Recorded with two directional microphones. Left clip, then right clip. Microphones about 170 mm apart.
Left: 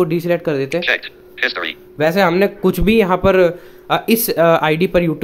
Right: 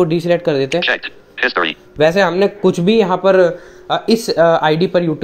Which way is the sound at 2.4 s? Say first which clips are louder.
Right 2 dB; 15° left (ahead or behind).